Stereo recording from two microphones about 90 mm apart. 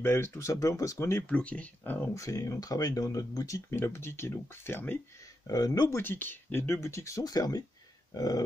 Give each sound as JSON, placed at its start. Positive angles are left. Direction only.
{"t": 0.0, "sound": "speech", "side_deg": 30}
{"t": 1.3, "sound": "speech", "side_deg": 15}
{"t": 2.1, "sound": "speech", "side_deg": 40}
{"t": 5.5, "sound": "speech", "side_deg": 45}
{"t": 5.9, "sound": "speech", "side_deg": 25}